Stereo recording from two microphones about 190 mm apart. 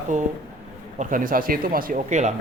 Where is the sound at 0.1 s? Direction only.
40° right (ahead or behind).